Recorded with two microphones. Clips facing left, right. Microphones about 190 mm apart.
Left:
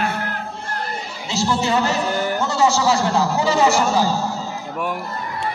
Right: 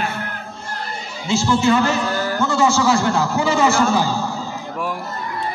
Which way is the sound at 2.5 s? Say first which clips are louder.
Right 1 dB; 40° left (ahead or behind).